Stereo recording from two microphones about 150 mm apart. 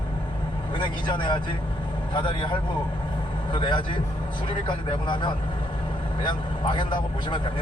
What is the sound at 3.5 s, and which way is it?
Speech, 30° left (ahead or behind).